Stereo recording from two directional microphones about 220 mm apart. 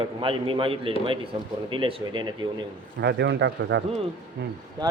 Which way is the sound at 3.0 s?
50° right (ahead or behind).